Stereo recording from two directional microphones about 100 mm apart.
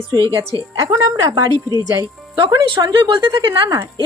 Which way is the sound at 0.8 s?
35° right (ahead or behind).